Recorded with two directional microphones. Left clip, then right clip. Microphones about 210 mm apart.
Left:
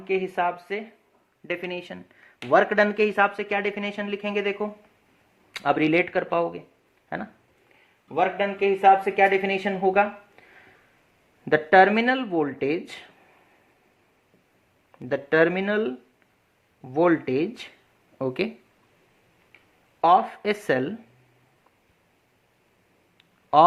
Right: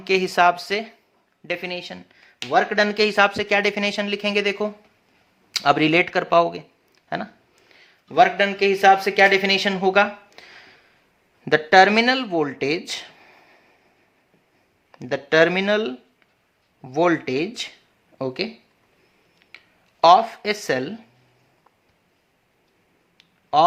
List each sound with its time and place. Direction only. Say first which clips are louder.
0.0 s speech: right 8 dB; 35° right (ahead or behind)
1.5 s speech: right 3 dB; 10° right (ahead or behind); by 4.7 s 30° right (ahead or behind)
5.5 s speech: right 4 dB; 15° right (ahead or behind)
8.0 s speech: right 7 dB; 40° right (ahead or behind); by 13.3 s 10° right (ahead or behind)
14.9 s speech: right 3 dB; 10° right (ahead or behind)
20.0 s speech: right 5 dB; 10° right (ahead or behind)